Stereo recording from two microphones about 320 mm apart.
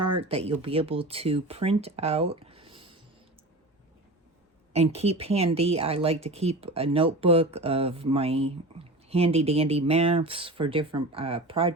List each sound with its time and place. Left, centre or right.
0.0 s speech: centre
4.7 s speech: centre